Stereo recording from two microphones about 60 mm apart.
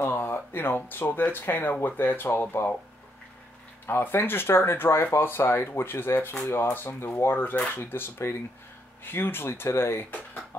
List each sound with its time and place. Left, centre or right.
0.0 s speech: left
3.8 s speech: left